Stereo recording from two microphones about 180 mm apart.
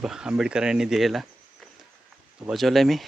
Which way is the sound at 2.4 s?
Centre (ahead or behind).